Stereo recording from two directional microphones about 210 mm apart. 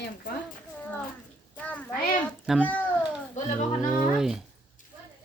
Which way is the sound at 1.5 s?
5° left (ahead or behind).